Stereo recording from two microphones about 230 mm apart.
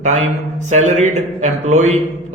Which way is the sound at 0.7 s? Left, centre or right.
Right.